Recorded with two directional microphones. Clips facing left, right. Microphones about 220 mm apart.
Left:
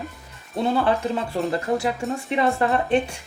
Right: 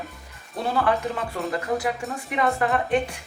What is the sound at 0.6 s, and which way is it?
A woman's voice, 25° left (ahead or behind).